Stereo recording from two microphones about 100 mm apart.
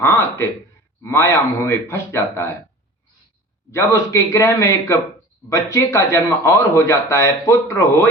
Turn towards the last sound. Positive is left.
turn(degrees=30)  # may be behind; listen again after turning